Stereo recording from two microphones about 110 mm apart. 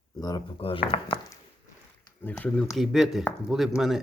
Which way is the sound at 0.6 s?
55° left (ahead or behind).